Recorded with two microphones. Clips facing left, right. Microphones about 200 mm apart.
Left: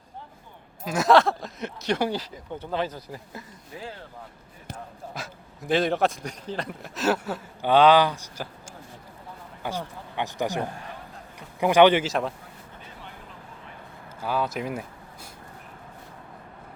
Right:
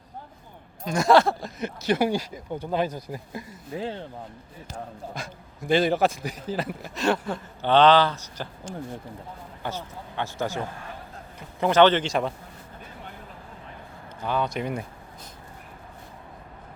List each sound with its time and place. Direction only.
0.9 s speech: centre (ahead or behind); by 3.4 s 15° right (ahead or behind)
3.8 s speech: 30° right (ahead or behind)
5.1 s a man's voice: centre (ahead or behind)
14.2 s speech: 5° left (ahead or behind)